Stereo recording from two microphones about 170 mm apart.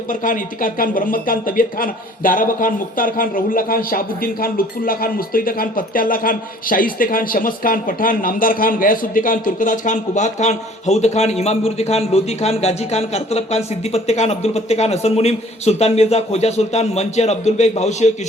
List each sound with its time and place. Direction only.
0.1 s speech: 50° left (ahead or behind)